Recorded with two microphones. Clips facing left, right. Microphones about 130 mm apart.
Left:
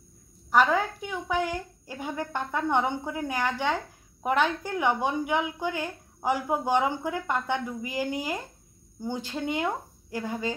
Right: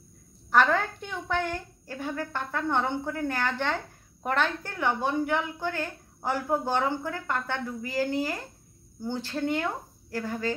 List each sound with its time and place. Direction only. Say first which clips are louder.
0.5 s a woman's voice: left 1 dB; 10° left (ahead or behind)